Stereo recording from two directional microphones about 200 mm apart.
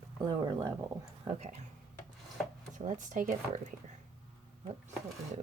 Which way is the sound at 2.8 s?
40° right (ahead or behind).